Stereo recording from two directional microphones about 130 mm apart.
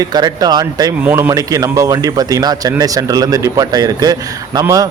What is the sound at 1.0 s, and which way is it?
A man's voice, 20° right (ahead or behind).